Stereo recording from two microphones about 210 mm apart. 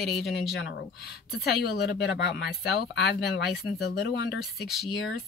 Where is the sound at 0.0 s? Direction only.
50° left (ahead or behind).